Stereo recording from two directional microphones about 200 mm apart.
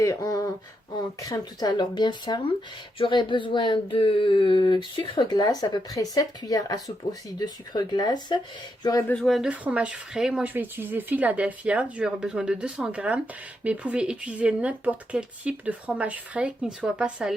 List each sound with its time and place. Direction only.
0.0 s a sound: 15° left (ahead or behind)
1.2 s speech: 20° left (ahead or behind)
9.1 s speech: centre (ahead or behind)